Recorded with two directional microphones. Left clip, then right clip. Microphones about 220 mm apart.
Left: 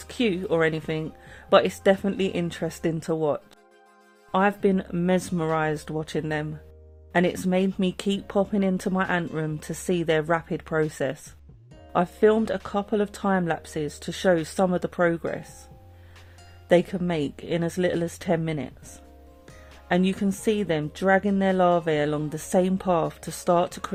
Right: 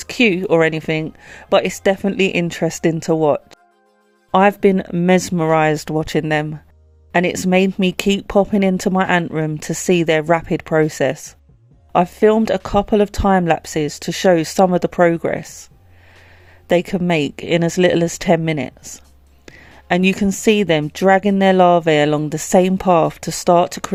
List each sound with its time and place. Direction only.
0.0 s speech: 30° right (ahead or behind)
16.6 s speech: 30° right (ahead or behind)